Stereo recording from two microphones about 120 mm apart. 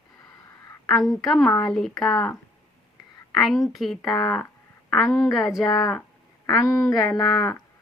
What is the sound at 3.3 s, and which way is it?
A woman's voice, centre (ahead or behind).